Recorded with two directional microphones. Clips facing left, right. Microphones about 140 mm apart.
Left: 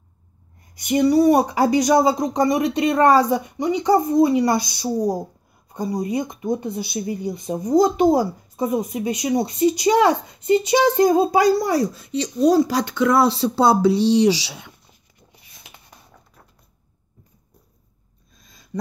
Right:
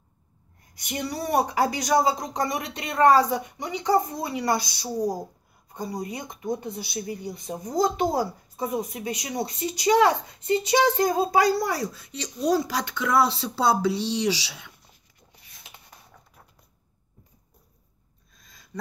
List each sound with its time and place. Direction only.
0.8 s speech: 15° left (ahead or behind); by 14.7 s 35° left (ahead or behind)